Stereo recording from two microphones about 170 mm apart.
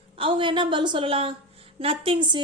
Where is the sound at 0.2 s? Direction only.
30° right (ahead or behind).